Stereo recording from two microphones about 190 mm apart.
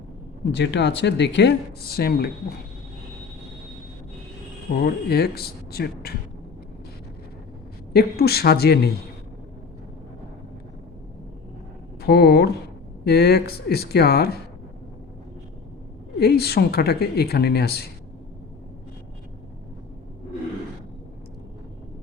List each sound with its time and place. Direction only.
0.4 s speech: 65° left (ahead or behind)
4.7 s speech: 50° left (ahead or behind)
7.9 s speech: 55° left (ahead or behind)
12.0 s speech: 55° left (ahead or behind)
16.2 s speech: 55° left (ahead or behind)